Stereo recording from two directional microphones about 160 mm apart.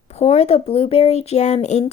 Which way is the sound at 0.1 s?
40° left (ahead or behind).